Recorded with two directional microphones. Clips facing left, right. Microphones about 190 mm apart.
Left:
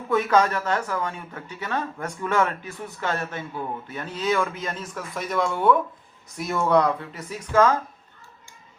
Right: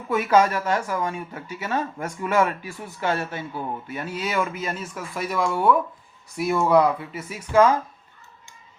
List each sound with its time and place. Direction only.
0.1 s speech: 10° right (ahead or behind)